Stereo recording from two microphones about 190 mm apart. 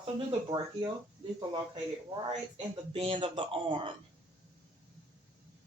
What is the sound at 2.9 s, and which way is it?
A woman's voice, 30° right (ahead or behind).